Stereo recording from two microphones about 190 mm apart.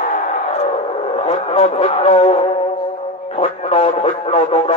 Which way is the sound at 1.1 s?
35° left (ahead or behind).